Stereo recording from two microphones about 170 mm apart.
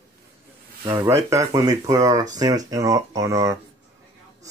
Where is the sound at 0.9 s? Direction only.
20° right (ahead or behind).